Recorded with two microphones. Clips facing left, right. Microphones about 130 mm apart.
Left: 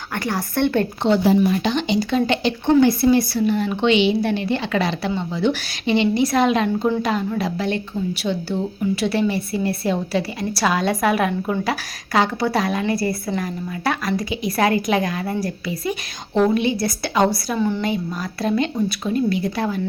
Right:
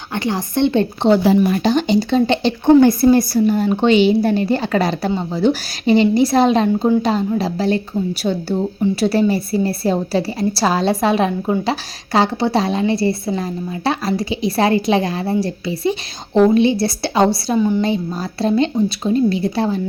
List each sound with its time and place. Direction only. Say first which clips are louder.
0.1 s speech: right 4 dB; 20° right (ahead or behind)
1.4 s speech: right 2 dB; 55° right (ahead or behind)
1.6 s speech: right 5 dB; 35° right (ahead or behind)
2.8 s a woman's voice: right 4 dB; 45° right (ahead or behind); by 17.6 s 30° right (ahead or behind)
17.6 s a woman's voice: right 5 dB; 15° right (ahead or behind)
17.8 s speech: right 4 dB; 30° right (ahead or behind)